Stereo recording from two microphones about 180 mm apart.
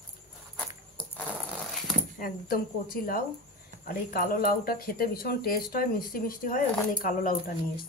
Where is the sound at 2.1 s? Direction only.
55° left (ahead or behind).